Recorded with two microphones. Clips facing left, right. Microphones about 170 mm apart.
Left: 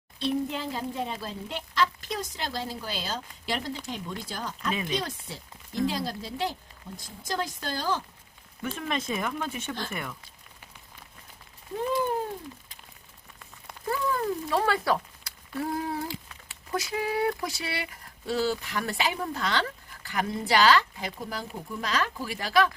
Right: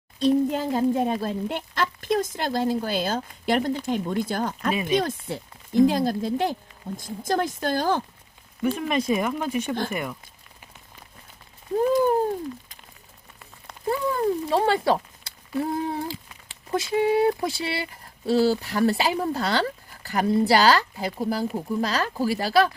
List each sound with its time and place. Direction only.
0.2 s speech: 45° right (ahead or behind)
8.6 s speech: 15° right (ahead or behind)
13.8 s a sound: 25° right (ahead or behind)
16.5 s speech: 25° right (ahead or behind)